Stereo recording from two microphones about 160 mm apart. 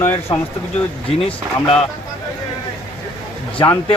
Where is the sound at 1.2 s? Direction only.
40° left (ahead or behind).